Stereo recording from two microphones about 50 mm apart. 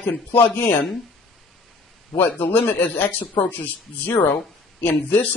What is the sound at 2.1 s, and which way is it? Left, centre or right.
A man's voice, left.